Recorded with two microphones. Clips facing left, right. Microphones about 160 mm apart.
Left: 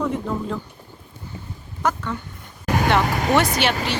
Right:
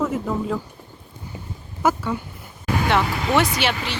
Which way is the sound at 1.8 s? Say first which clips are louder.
Right 3 dB; 10° right (ahead or behind).